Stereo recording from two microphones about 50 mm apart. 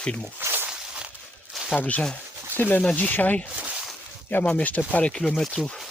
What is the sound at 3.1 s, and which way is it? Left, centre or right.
Speech, left.